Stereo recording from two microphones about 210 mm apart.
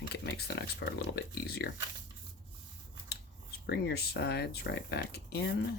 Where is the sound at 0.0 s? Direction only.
50° left (ahead or behind).